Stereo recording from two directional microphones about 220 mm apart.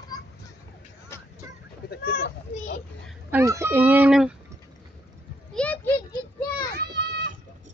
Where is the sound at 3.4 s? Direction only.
15° right (ahead or behind).